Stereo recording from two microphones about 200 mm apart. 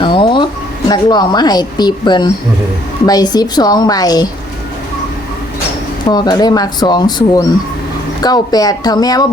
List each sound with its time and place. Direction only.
0.0 s a sound: 25° left (ahead or behind)
0.9 s a woman's voice: 20° left (ahead or behind)
6.1 s a woman's voice: 20° left (ahead or behind)